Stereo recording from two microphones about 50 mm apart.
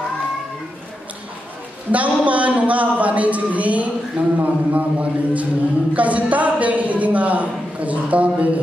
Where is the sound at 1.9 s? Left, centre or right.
Right.